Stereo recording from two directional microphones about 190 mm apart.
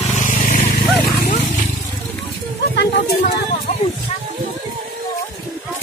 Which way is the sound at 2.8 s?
60° left (ahead or behind).